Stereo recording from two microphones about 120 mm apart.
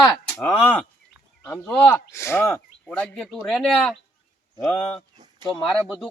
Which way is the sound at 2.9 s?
10° left (ahead or behind).